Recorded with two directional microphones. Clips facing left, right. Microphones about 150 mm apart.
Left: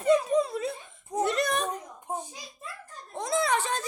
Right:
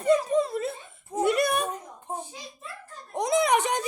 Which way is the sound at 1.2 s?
10° right (ahead or behind).